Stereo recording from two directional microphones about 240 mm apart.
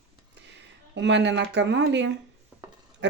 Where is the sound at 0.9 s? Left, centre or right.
Right.